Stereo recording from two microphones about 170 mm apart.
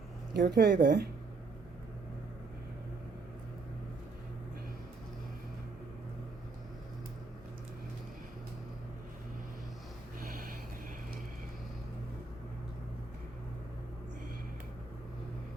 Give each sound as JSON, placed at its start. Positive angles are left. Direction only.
{"t": 0.3, "sound": "speech", "side_deg": -70}
{"t": 10.2, "sound": "snort", "side_deg": -60}